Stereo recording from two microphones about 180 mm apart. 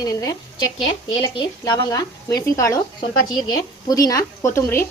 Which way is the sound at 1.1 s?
25° left (ahead or behind).